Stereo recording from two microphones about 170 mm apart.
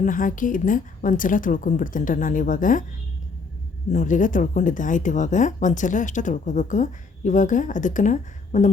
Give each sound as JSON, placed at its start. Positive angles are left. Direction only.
{"t": 0.0, "sound": "speech", "side_deg": 50}
{"t": 3.9, "sound": "speech", "side_deg": 50}